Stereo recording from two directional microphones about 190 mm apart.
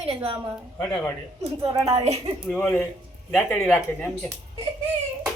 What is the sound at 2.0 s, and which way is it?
Speech, 30° right (ahead or behind).